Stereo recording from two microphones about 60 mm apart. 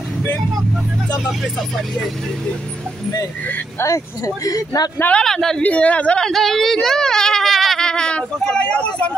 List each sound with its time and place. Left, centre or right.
4.5 s speech: left
5.1 s speech: centre
5.6 s speech: left
6.2 s speech: centre
7.8 s speech: centre